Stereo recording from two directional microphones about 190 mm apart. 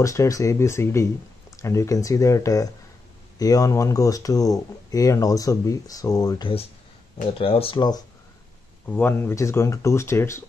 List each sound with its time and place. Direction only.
0.0 s speech: 15° left (ahead or behind)
8.8 s speech: 10° left (ahead or behind)